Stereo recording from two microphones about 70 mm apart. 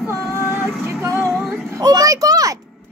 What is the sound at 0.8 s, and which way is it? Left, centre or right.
Female singing, right.